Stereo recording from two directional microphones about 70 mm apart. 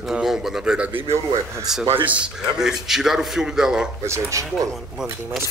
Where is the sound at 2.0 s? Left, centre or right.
Centre.